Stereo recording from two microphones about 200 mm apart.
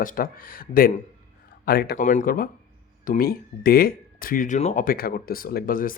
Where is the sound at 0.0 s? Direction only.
45° left (ahead or behind).